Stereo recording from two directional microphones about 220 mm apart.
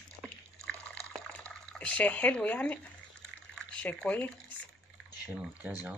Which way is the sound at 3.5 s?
5° left (ahead or behind).